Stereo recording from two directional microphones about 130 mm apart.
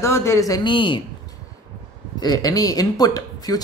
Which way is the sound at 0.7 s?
40° left (ahead or behind).